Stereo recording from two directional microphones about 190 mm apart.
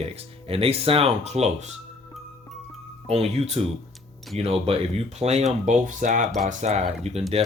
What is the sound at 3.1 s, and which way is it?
Speech, 35° right (ahead or behind).